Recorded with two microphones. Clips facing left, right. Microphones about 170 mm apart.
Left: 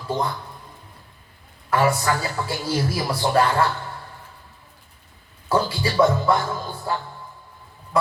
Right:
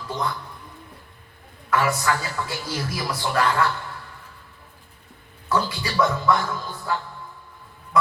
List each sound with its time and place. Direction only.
1.7 s a man's voice: 30° left (ahead or behind)
5.5 s a man's voice: 30° left (ahead or behind)